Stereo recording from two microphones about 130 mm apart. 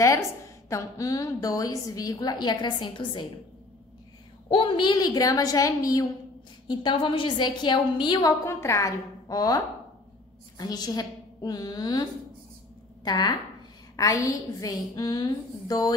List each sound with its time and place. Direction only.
0.7 s a woman's voice: 25° left (ahead or behind)
4.5 s a woman's voice: 40° left (ahead or behind)